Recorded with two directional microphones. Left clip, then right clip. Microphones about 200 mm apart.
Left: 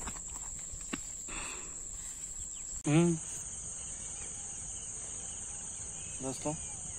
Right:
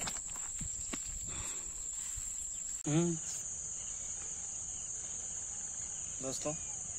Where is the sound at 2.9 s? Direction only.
5° right (ahead or behind).